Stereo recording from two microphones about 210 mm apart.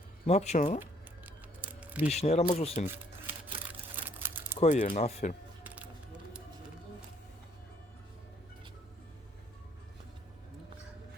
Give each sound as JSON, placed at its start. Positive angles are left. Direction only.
{"t": 0.3, "sound": "speech", "side_deg": 30}
{"t": 1.8, "sound": "a sound", "side_deg": -5}
{"t": 2.0, "sound": "speech", "side_deg": 30}
{"t": 3.2, "sound": "a sound", "side_deg": -10}
{"t": 3.9, "sound": "crumpling", "side_deg": -10}
{"t": 4.6, "sound": "speech", "side_deg": 40}
{"t": 5.6, "sound": "music", "side_deg": -5}